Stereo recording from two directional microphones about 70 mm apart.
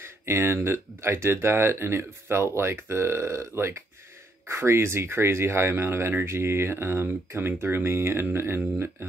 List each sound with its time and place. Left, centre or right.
0.0 s speech: right